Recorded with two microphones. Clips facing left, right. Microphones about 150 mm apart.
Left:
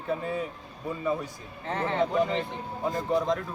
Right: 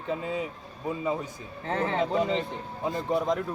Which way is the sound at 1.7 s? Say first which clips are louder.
Right 2 dB; 35° right (ahead or behind).